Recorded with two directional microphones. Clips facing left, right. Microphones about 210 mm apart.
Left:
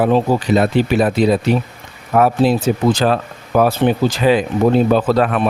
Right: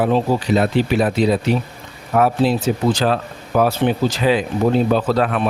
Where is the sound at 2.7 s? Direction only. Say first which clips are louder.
Left 3 dB; 60° left (ahead or behind).